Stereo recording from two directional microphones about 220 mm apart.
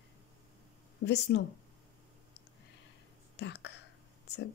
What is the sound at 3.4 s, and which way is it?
Speech, 50° left (ahead or behind).